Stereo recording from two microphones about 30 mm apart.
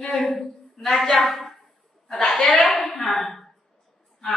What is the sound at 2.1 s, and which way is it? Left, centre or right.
Speech, left.